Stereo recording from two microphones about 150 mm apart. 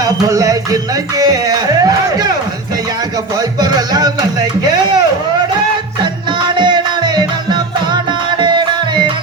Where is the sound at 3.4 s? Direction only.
25° right (ahead or behind).